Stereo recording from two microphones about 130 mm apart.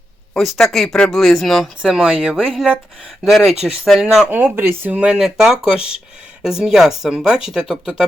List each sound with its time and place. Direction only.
0.3 s speech: centre (ahead or behind)
4.3 s speech: 15° right (ahead or behind)